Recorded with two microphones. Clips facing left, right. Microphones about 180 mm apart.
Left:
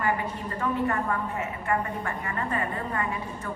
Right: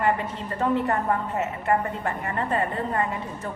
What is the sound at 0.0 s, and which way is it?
A woman's voice, 25° right (ahead or behind).